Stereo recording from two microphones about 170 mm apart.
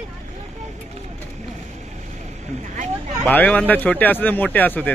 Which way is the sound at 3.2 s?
10° left (ahead or behind).